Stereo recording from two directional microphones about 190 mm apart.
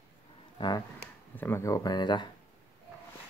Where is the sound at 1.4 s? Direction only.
10° left (ahead or behind).